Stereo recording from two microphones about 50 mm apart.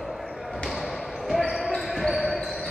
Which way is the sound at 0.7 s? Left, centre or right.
Centre.